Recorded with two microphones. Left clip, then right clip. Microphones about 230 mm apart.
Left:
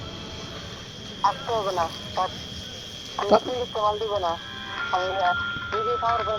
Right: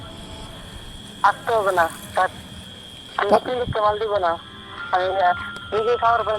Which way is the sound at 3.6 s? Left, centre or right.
Right.